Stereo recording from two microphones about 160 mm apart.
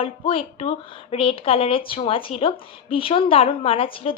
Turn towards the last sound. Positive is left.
turn(degrees=35)  # may be behind; listen again after turning